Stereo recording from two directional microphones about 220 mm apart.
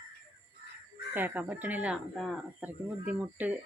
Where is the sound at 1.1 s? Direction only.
10° right (ahead or behind).